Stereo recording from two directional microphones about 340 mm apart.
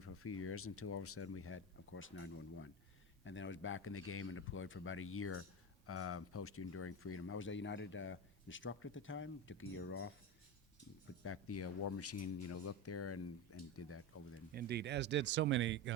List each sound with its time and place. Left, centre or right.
0.0 s speech: left
11.2 s speech: left
14.5 s speech: right